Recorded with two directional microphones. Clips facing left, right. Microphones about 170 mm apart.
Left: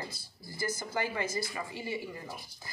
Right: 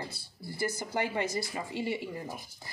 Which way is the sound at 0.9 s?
25° right (ahead or behind).